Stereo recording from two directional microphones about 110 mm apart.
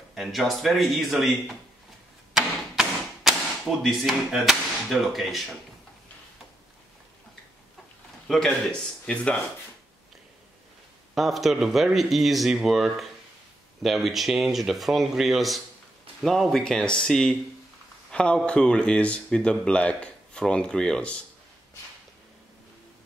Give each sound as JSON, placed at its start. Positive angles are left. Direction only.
{"t": 0.1, "sound": "speech", "side_deg": 0}
{"t": 2.3, "sound": "a sound", "side_deg": -5}
{"t": 3.8, "sound": "speech", "side_deg": 0}
{"t": 8.3, "sound": "speech", "side_deg": 5}
{"t": 11.1, "sound": "speech", "side_deg": 0}